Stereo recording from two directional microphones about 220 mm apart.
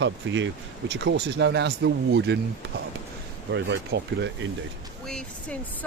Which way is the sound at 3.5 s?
55° right (ahead or behind).